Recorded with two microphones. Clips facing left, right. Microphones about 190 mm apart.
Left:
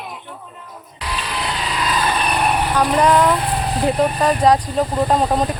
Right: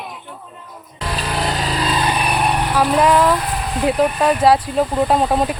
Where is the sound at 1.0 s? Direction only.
45° right (ahead or behind).